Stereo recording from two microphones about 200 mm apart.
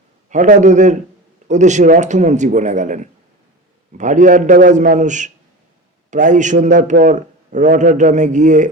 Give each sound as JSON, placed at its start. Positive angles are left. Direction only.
{"t": 0.3, "sound": "a man's voice", "side_deg": -40}